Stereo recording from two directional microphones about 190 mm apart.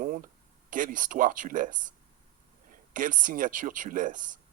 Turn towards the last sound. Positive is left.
turn(degrees=-45)  # may be behind; listen again after turning